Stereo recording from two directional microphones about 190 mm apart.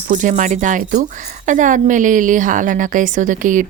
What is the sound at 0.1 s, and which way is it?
A woman's voice, 40° right (ahead or behind).